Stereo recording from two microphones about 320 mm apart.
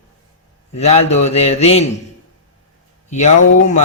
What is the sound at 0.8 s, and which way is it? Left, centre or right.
Speech, centre.